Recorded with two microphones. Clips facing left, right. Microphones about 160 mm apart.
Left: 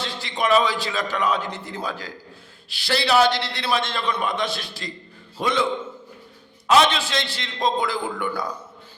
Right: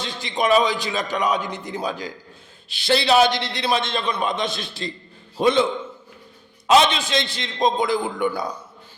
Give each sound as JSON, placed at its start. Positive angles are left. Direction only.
{"t": 0.0, "sound": "a man's voice", "side_deg": -20}
{"t": 6.7, "sound": "a man's voice", "side_deg": -20}